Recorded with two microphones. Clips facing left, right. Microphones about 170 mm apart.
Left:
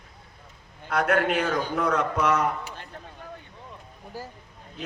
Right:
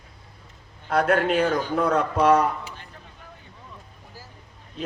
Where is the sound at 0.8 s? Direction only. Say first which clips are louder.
Right 2 dB; 30° right (ahead or behind).